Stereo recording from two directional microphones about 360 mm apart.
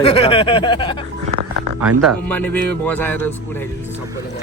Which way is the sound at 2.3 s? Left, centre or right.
Centre.